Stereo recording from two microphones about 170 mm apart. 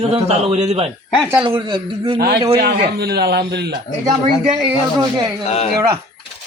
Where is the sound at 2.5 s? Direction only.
75° right (ahead or behind).